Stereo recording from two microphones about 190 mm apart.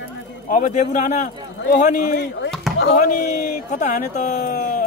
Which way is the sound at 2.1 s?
65° left (ahead or behind).